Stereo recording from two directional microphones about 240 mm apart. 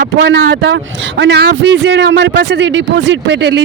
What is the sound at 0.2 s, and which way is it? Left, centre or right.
A man's voice, right.